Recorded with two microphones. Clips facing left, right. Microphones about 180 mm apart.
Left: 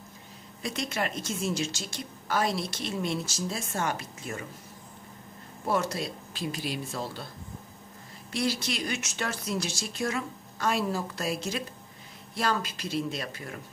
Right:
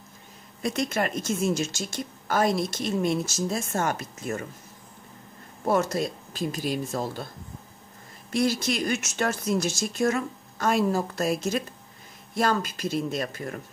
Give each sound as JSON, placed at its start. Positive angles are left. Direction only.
{"t": 0.6, "sound": "a woman's voice", "side_deg": -45}
{"t": 5.7, "sound": "a woman's voice", "side_deg": -45}
{"t": 8.3, "sound": "a woman's voice", "side_deg": -45}